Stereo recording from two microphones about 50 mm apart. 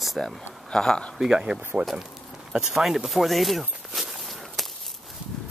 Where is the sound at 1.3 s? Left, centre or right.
Centre.